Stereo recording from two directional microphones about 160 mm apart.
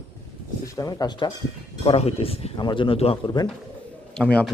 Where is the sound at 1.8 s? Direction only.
40° left (ahead or behind).